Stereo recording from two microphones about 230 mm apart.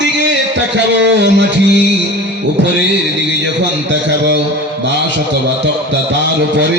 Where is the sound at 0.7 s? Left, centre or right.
Right.